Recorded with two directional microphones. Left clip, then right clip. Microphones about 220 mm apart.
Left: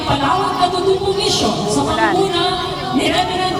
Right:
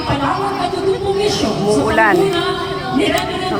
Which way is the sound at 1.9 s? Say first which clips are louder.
Right 4 dB; 25° right (ahead or behind).